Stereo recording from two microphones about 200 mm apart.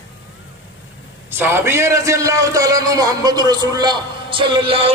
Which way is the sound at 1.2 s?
10° right (ahead or behind).